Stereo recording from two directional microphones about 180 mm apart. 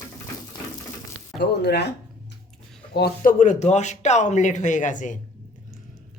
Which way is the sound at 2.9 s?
65° left (ahead or behind).